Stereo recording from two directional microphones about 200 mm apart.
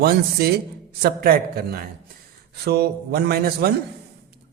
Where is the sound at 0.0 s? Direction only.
50° right (ahead or behind).